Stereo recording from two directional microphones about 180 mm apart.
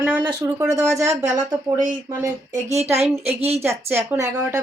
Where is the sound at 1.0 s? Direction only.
40° right (ahead or behind).